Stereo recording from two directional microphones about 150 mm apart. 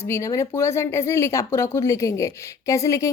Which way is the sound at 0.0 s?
20° left (ahead or behind).